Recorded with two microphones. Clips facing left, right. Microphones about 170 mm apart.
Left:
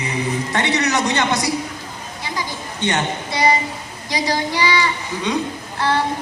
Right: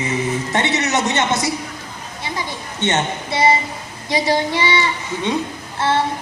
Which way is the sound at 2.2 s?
25° right (ahead or behind).